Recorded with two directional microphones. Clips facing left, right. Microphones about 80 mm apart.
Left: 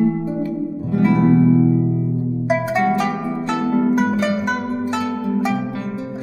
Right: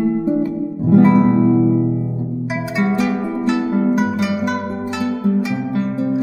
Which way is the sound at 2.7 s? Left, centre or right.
Left.